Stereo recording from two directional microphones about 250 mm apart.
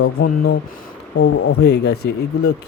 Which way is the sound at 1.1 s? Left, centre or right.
Left.